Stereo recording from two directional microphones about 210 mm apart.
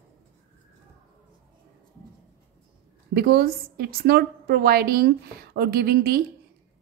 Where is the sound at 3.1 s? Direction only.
50° right (ahead or behind).